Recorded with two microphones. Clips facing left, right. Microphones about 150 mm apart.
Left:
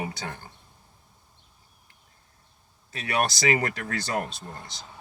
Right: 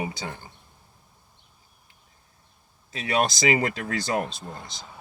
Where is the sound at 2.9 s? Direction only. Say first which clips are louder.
Right 2 dB; 15° right (ahead or behind).